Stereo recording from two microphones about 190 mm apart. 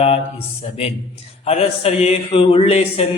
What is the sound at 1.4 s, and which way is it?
Mantra, 30° left (ahead or behind).